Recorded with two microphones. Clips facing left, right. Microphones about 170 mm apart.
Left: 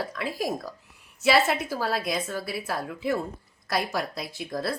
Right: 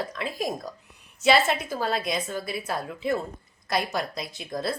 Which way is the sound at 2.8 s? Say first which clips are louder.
Even; 5° left (ahead or behind).